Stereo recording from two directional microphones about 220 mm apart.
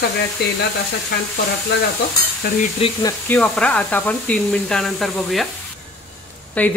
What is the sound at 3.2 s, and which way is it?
Speech, 5° left (ahead or behind).